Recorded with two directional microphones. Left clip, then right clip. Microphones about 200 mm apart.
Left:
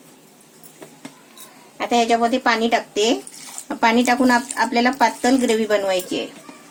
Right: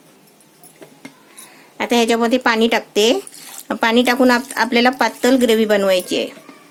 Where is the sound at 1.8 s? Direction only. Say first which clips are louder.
Right 1 dB; 50° right (ahead or behind).